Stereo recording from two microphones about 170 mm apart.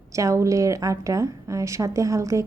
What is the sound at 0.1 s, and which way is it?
A woman's voice, 20° right (ahead or behind).